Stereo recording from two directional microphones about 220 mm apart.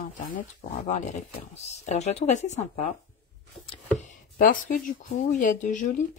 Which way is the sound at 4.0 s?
35° left (ahead or behind).